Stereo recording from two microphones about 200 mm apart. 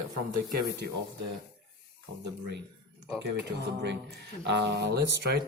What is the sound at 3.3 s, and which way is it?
Speech, 60° right (ahead or behind).